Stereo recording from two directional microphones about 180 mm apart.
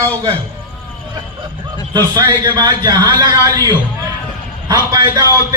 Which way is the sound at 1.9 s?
25° right (ahead or behind).